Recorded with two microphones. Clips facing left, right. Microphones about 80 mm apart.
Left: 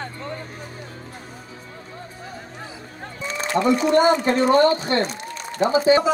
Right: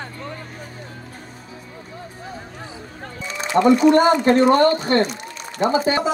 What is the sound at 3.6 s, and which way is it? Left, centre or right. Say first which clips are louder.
A man's voice: right 4 dB; right.